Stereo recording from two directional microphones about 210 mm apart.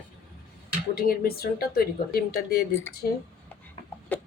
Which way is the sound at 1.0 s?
45° left (ahead or behind).